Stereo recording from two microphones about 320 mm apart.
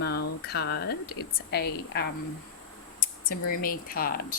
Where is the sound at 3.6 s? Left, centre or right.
Left.